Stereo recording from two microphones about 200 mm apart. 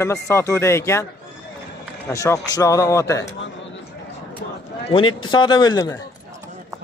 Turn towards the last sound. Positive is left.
turn(degrees=20)  # may be behind; listen again after turning